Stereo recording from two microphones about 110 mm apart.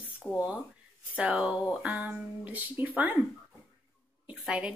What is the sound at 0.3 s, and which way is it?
Speech, 10° right (ahead or behind).